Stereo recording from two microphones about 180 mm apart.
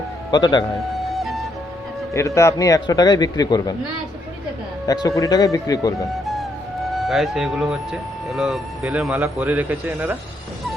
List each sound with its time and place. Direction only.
0.3 s speech: 25° left (ahead or behind)
0.8 s music: centre (ahead or behind)
2.1 s speech: 15° left (ahead or behind)
4.9 s speech: 20° left (ahead or behind)
6.2 s music: centre (ahead or behind)
8.3 s speech: centre (ahead or behind)